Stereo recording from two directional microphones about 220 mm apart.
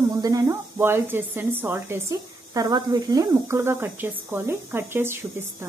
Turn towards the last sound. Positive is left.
turn(degrees=-10)  # may be behind; listen again after turning